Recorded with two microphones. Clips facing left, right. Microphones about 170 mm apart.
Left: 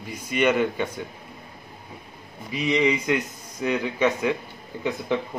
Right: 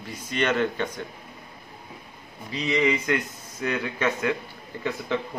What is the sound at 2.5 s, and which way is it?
A man's voice, 15° left (ahead or behind).